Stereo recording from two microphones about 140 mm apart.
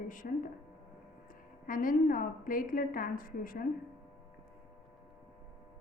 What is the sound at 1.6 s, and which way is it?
A woman's voice, 75° left (ahead or behind).